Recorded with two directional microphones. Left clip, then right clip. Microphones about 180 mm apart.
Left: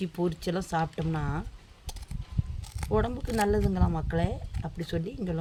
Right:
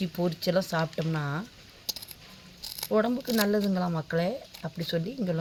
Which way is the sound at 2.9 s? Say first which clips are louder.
Right 3 dB; 45° left (ahead or behind).